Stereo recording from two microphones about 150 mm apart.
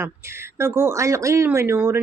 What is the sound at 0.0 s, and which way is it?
Speech, 15° right (ahead or behind).